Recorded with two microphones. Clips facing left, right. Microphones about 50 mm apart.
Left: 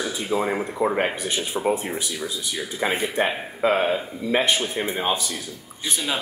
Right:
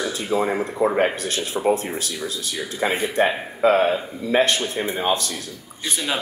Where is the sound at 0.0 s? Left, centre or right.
Centre.